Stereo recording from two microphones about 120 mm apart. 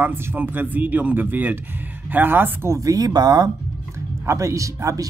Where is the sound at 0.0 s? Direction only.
15° right (ahead or behind).